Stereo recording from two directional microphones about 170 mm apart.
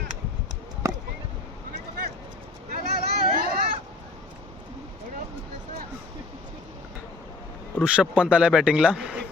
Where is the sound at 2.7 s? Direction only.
65° right (ahead or behind).